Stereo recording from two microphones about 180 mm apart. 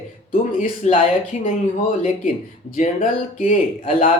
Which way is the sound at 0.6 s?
45° left (ahead or behind).